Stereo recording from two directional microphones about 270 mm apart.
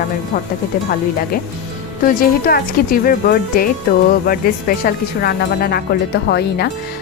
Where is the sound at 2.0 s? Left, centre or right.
Left.